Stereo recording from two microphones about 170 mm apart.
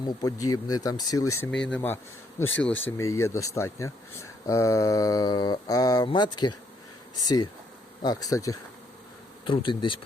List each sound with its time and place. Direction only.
0.0 s speech: 20° left (ahead or behind)
9.5 s speech: 30° left (ahead or behind)